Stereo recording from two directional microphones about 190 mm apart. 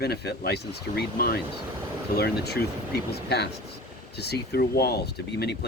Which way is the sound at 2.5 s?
60° left (ahead or behind).